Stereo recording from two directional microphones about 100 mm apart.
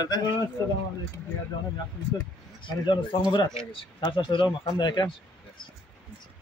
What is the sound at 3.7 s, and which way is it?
A man's voice, 55° left (ahead or behind).